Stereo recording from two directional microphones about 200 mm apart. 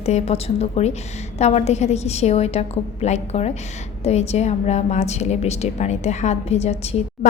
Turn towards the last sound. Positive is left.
turn(degrees=30)  # may be behind; listen again after turning